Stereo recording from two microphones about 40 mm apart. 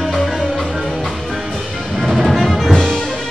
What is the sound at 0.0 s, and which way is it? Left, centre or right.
Music, centre.